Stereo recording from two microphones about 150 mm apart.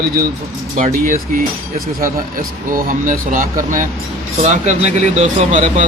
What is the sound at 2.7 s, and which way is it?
A man's voice, 65° right (ahead or behind).